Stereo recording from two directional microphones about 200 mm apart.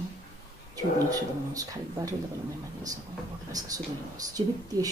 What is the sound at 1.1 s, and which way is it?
Speech, 15° right (ahead or behind).